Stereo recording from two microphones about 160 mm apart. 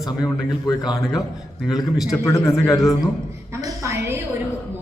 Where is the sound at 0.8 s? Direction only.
Centre (ahead or behind).